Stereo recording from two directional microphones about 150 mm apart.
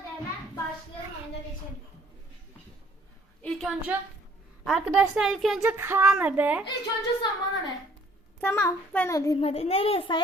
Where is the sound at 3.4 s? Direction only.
Centre (ahead or behind).